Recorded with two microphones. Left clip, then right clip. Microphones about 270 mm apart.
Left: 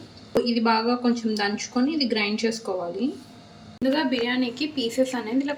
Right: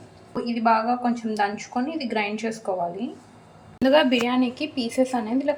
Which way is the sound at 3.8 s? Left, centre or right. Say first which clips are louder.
Right 5 dB; centre.